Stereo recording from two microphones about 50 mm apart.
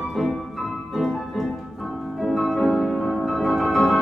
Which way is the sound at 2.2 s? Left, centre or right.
Centre.